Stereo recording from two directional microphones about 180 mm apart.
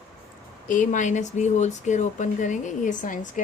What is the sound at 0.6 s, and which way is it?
Speech, 45° left (ahead or behind).